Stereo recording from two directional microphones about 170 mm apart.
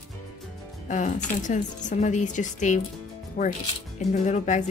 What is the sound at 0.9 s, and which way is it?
A woman's voice, 45° left (ahead or behind).